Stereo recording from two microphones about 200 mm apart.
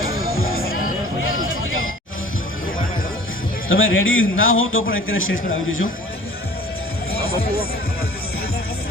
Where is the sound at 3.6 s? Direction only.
80° left.